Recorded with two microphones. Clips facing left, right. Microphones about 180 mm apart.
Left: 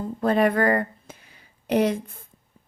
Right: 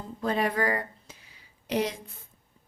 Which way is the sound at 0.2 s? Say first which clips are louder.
Left 7 dB; 55° left (ahead or behind).